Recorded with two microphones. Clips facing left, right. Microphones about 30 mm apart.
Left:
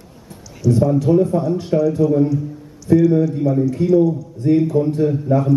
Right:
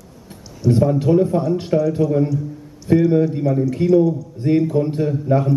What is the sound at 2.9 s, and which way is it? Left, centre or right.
A man's voice, right.